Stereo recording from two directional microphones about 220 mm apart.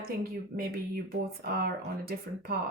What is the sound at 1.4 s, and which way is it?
Speech, 45° right (ahead or behind).